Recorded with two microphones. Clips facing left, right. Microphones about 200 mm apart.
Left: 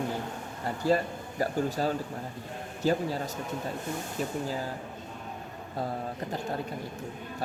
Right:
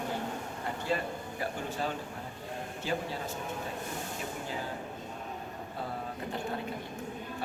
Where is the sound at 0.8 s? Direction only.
40° left (ahead or behind).